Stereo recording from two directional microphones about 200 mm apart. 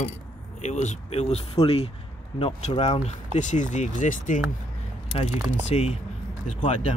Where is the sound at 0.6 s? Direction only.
35° left (ahead or behind).